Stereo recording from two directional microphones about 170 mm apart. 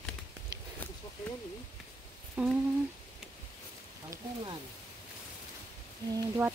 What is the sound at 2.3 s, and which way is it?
Humming, 5° right (ahead or behind).